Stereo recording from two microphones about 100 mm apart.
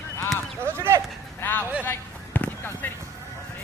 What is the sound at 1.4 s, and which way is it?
Speech, 20° left (ahead or behind).